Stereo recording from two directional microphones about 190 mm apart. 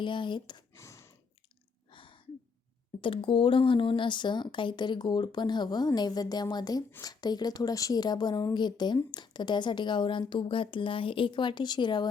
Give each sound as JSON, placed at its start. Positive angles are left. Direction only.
{"t": 0.0, "sound": "speech", "side_deg": 25}
{"t": 1.9, "sound": "a sound", "side_deg": 25}
{"t": 3.0, "sound": "speech", "side_deg": 25}